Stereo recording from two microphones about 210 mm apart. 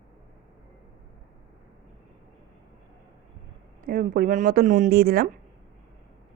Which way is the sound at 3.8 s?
40° right (ahead or behind).